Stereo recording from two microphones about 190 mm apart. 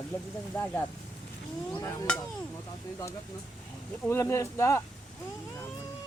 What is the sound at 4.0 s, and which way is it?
Speech, 15° left (ahead or behind).